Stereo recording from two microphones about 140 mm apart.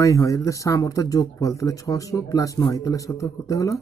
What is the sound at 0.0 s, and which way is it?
Speech, 25° left (ahead or behind).